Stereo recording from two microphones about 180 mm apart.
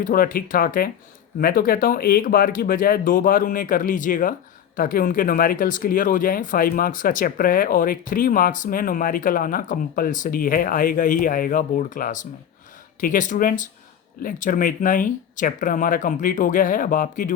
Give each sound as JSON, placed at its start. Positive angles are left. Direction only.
{"t": 0.0, "sound": "speech", "side_deg": 50}